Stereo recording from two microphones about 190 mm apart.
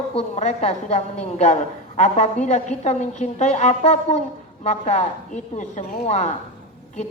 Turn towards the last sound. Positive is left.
turn(degrees=35)  # may be behind; listen again after turning